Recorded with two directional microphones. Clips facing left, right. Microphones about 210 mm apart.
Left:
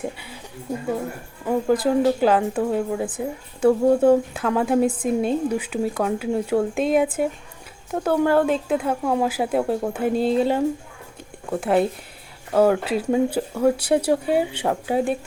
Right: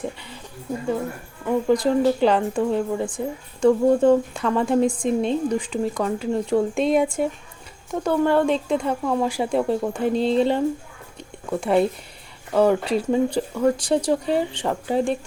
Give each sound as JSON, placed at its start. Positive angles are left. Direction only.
{"t": 0.0, "sound": "speech", "side_deg": 5}
{"t": 1.6, "sound": "speech", "side_deg": 5}
{"t": 11.2, "sound": "a sound", "side_deg": 5}
{"t": 12.5, "sound": "speech", "side_deg": 5}